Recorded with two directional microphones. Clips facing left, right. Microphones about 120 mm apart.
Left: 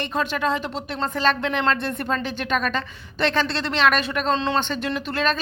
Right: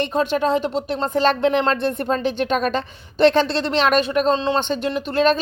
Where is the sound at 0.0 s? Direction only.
30° right (ahead or behind).